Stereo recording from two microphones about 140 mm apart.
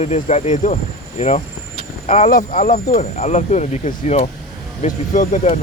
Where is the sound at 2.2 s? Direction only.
75° left (ahead or behind).